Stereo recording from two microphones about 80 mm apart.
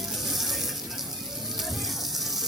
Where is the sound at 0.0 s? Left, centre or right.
Centre.